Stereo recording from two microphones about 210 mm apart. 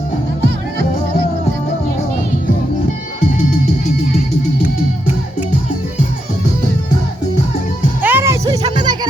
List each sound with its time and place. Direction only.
8.0 s music: 10° right (ahead or behind)